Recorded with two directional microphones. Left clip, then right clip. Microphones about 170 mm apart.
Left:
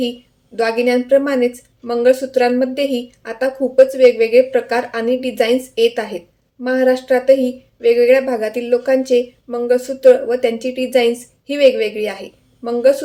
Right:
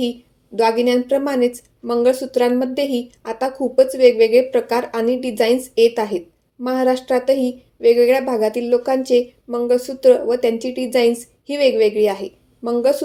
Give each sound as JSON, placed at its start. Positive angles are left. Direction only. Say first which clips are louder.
{"t": 0.5, "sound": "speech", "louder": "even", "side_deg": -30}